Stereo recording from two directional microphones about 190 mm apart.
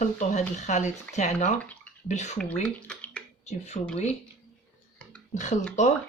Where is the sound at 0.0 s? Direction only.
40° left (ahead or behind).